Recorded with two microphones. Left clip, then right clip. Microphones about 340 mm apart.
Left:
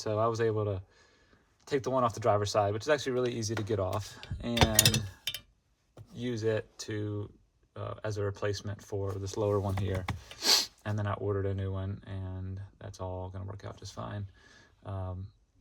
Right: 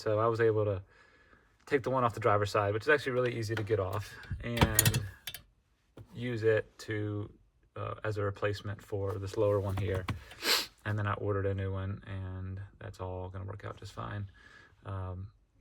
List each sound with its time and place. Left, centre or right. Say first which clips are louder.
0.0 s speech: right 1 dB; centre
4.5 s speech: left 4 dB; left
6.1 s speech: right 3 dB; centre
12.5 s a sound: even; centre
13.1 s speech: left 2 dB; left
13.3 s speech: right 1 dB; centre